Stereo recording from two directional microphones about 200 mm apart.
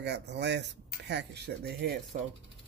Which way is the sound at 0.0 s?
60° right (ahead or behind).